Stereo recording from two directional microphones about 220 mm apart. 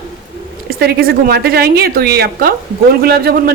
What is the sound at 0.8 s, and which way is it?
A woman's voice, 45° right (ahead or behind).